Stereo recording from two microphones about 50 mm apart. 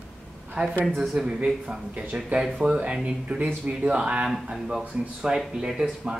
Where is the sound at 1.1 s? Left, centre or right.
Centre.